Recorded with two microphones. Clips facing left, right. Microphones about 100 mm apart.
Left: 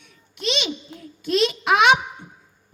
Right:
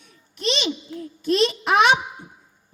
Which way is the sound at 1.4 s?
35° right (ahead or behind).